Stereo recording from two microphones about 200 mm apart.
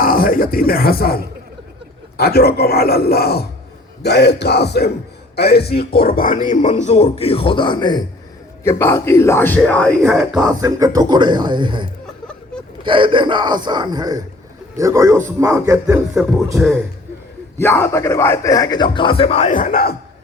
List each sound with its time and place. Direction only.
0.0 s a man's voice: 45° left (ahead or behind); by 10.4 s centre (ahead or behind)
10.4 s speech: 15° right (ahead or behind)
12.0 s chuckle: 5° left (ahead or behind)
12.8 s a man's voice: 25° right (ahead or behind)
17.6 s speech: 15° left (ahead or behind); by 20.0 s 50° left (ahead or behind)